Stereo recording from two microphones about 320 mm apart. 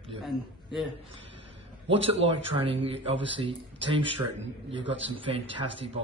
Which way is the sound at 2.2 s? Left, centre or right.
Centre.